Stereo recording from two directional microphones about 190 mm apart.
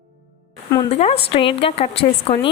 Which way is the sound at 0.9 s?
35° left (ahead or behind).